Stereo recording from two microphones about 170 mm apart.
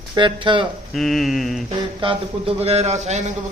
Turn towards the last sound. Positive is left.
turn(degrees=-40)  # may be behind; listen again after turning